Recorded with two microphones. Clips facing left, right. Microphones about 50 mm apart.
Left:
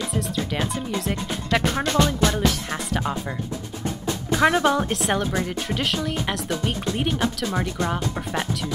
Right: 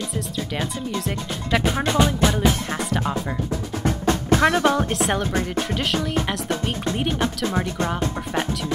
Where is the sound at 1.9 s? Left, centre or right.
Centre.